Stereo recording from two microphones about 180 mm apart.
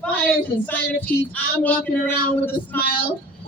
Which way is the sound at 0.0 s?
5° left (ahead or behind).